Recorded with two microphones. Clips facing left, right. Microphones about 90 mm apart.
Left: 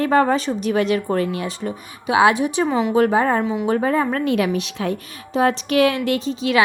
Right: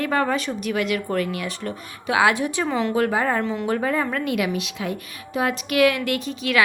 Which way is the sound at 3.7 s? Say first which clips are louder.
Left 4 dB; 35° left (ahead or behind).